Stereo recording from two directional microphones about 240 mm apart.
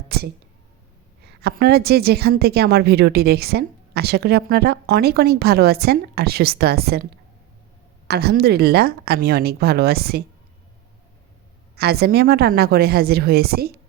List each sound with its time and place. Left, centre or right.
0.1 s a sound: right
1.4 s a woman's voice: right
11.8 s a woman's voice: right